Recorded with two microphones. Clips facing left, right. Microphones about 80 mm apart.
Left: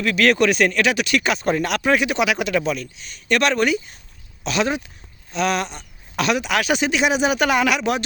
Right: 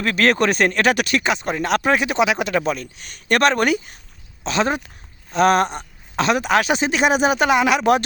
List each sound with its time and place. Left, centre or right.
0.0 s speech: right
1.2 s speech: right
1.6 s speech: right
3.0 s speech: right
4.4 s speech: right
5.3 s speech: right
6.1 s speech: right
7.8 s speech: right